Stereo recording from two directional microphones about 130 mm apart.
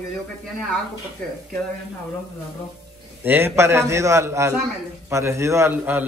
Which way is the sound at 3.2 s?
15° right (ahead or behind).